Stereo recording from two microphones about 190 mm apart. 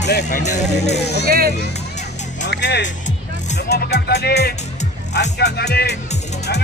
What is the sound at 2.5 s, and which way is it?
Speech, 65° left (ahead or behind).